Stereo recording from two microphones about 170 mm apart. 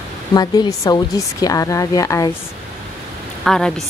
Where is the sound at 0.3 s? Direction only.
25° left (ahead or behind).